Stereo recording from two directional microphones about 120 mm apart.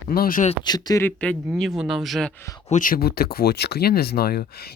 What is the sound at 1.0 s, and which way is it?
Speech, 10° left (ahead or behind).